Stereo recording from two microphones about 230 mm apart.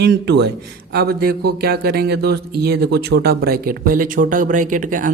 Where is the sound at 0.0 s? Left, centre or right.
Right.